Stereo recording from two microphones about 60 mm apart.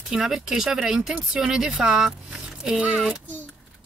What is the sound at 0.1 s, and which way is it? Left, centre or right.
Speech, centre.